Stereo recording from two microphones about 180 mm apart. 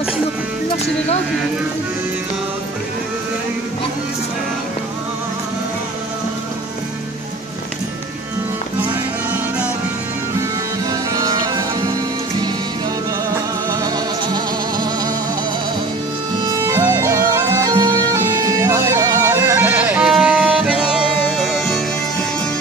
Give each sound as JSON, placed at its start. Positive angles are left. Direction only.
{"t": 10.9, "sound": "music", "side_deg": -20}
{"t": 13.3, "sound": "music", "side_deg": -20}
{"t": 16.6, "sound": "music", "side_deg": -20}